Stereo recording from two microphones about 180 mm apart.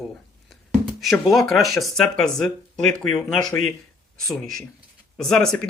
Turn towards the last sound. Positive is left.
turn(degrees=5)  # may be behind; listen again after turning